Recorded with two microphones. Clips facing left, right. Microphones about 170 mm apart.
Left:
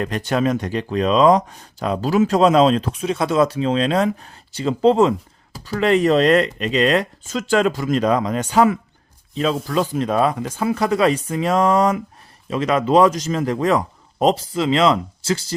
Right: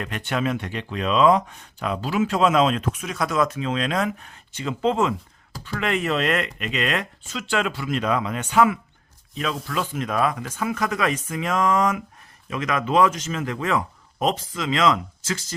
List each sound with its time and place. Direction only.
0.0 s speech: 35° left (ahead or behind)